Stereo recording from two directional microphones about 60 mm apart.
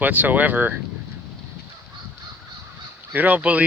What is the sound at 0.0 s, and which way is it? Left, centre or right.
Speech, right.